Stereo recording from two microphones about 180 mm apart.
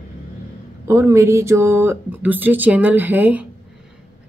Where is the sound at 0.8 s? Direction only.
15° right (ahead or behind).